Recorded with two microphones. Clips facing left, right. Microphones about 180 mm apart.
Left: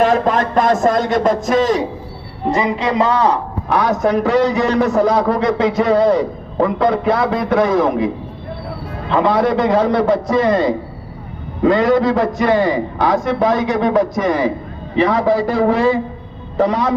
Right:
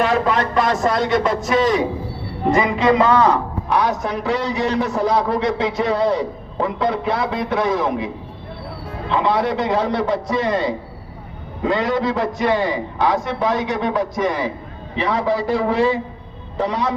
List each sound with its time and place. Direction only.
0.0 s a man's voice: 45° left (ahead or behind)
2.5 s a man's voice: 35° left (ahead or behind)
3.8 s a man's voice: 45° left (ahead or behind)